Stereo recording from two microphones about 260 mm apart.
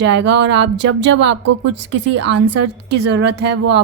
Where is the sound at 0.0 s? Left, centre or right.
Right.